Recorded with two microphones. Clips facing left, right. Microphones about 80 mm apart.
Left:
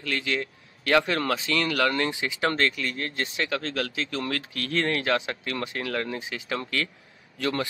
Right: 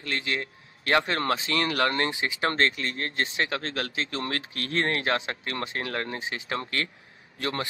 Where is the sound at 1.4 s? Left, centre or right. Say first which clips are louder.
Left 1 dB; right.